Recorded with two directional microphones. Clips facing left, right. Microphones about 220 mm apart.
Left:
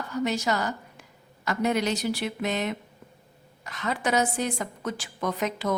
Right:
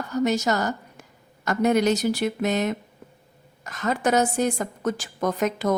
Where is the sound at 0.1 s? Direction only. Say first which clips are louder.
Right 4 dB; 45° right (ahead or behind).